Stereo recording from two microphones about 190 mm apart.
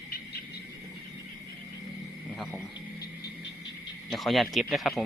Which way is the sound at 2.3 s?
Centre (ahead or behind).